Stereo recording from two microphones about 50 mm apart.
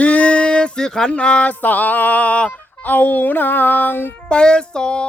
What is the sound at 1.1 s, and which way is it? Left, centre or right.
Speech, left.